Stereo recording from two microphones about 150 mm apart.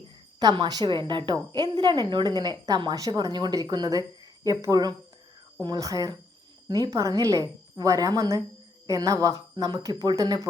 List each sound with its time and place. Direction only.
0.3 s a woman's voice: 30° right (ahead or behind)